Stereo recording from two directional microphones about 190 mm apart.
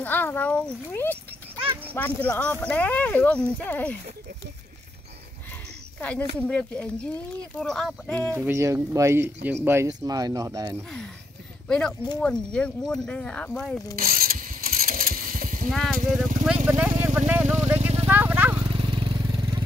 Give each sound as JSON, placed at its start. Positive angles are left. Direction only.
{"t": 0.0, "sound": "speech", "side_deg": 10}
{"t": 5.9, "sound": "speech", "side_deg": 10}
{"t": 8.4, "sound": "speech", "side_deg": -15}
{"t": 11.6, "sound": "speech", "side_deg": 5}
{"t": 13.9, "sound": "a sound", "side_deg": -50}
{"t": 15.7, "sound": "speech", "side_deg": 0}
{"t": 16.6, "sound": "vehicle", "side_deg": -10}
{"t": 18.6, "sound": "vehicle", "side_deg": -25}